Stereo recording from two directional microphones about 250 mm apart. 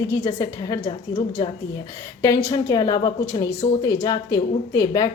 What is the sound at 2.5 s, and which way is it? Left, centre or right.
A woman's voice, centre.